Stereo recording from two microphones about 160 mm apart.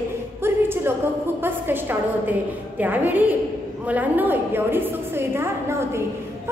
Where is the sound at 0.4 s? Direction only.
15° right (ahead or behind).